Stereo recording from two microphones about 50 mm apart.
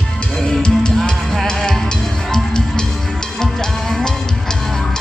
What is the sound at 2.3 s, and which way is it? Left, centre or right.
Music, centre.